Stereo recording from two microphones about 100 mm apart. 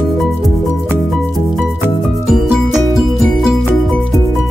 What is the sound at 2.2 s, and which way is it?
Music, 5° right (ahead or behind).